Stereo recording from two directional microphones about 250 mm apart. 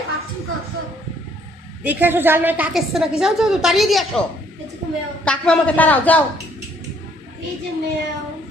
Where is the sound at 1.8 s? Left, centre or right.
Centre.